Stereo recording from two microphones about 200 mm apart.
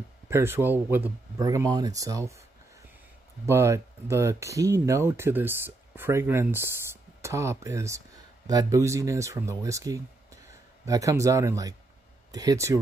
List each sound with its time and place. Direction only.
0.3 s speech: 10° right (ahead or behind)
3.4 s speech: 15° right (ahead or behind)